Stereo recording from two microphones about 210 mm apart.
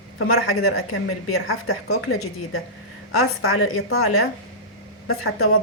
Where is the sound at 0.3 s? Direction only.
90° left.